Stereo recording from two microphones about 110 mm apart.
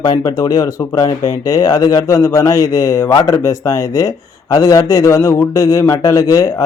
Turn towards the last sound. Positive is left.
turn(degrees=30)  # may be behind; listen again after turning